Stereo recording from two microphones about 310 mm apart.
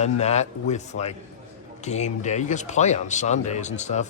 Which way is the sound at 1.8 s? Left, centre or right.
Left.